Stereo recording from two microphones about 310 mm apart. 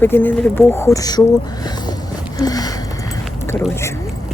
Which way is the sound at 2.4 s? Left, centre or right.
Centre.